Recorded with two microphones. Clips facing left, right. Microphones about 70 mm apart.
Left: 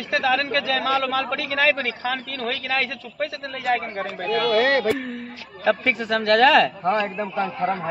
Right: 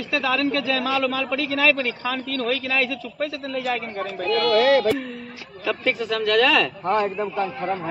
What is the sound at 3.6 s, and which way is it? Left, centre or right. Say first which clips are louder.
Speech: left 3 dB; left.